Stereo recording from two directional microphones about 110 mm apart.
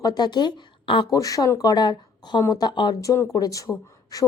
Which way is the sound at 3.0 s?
30° left (ahead or behind).